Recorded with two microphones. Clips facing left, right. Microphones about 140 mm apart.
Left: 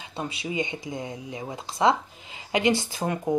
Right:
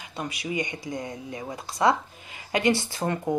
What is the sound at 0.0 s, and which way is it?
Speech, 25° left (ahead or behind).